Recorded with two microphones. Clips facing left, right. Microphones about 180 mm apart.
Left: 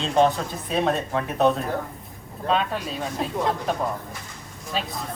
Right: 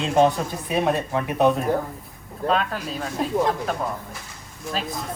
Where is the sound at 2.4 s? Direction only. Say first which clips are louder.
Right 1 dB; centre (ahead or behind).